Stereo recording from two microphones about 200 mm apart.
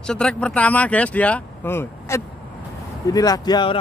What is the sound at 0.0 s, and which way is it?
A man's voice, 5° left (ahead or behind).